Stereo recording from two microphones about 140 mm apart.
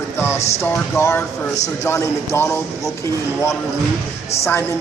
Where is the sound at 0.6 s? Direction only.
15° left (ahead or behind).